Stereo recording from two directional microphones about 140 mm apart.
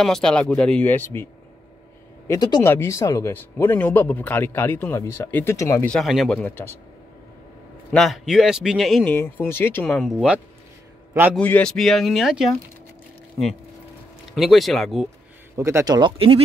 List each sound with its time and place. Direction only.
0.0 s speech: 5° left (ahead or behind)
2.2 s speech: 30° left (ahead or behind)
5.9 s speech: centre (ahead or behind)
6.5 s speech: 15° left (ahead or behind)
7.9 s speech: centre (ahead or behind)
9.1 s speech: 15° left (ahead or behind)
10.1 s speech: 10° right (ahead or behind)
11.3 s speech: 10° left (ahead or behind)
14.3 s speech: centre (ahead or behind)
15.5 s speech: 20° right (ahead or behind)